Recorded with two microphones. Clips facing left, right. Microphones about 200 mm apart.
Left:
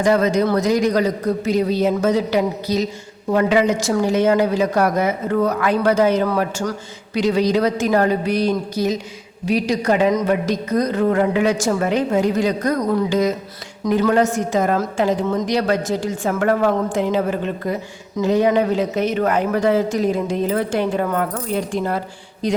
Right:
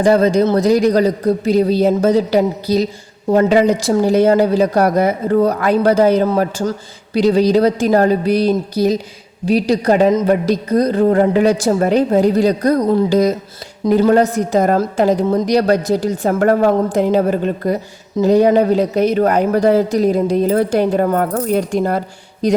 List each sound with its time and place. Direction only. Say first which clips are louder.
0.0 s speech: right 4 dB; 30° right (ahead or behind)